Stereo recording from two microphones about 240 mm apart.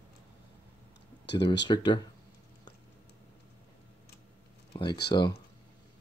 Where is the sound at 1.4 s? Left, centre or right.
Left.